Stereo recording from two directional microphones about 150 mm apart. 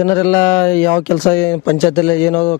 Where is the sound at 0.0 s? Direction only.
15° left (ahead or behind).